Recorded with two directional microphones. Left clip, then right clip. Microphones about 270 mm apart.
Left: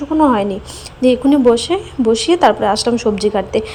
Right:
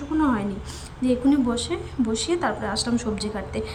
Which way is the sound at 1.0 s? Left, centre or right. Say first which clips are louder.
Left 9 dB; centre.